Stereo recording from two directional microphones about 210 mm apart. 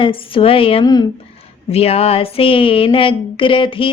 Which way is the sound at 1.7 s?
30° left (ahead or behind).